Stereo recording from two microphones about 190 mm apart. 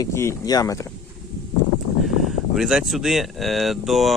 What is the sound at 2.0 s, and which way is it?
Speech, centre (ahead or behind).